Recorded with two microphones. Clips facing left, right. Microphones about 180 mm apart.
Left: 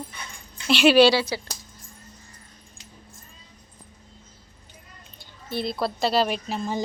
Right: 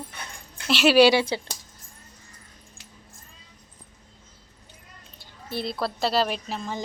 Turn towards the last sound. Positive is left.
turn(degrees=5)  # may be behind; listen again after turning